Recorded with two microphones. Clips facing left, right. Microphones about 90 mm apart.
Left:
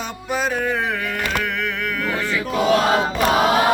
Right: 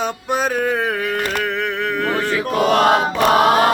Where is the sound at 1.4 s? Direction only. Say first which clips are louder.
Right 3 dB; 30° right (ahead or behind).